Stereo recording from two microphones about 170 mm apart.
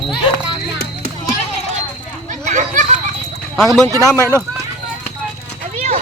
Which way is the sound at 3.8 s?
20° left (ahead or behind).